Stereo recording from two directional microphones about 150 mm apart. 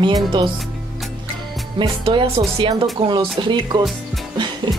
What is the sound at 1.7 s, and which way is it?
Speech, 35° right (ahead or behind).